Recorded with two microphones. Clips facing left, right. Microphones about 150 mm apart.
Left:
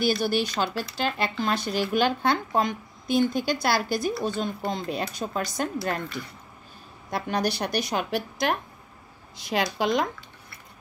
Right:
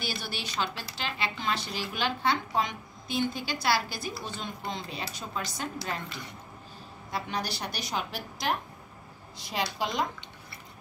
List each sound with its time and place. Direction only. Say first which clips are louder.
0.0 s speech: left 13 dB; 45° left (ahead or behind)
7.1 s a woman's voice: left 7 dB; 55° left (ahead or behind)
9.5 s speech: left 7 dB; 70° left (ahead or behind)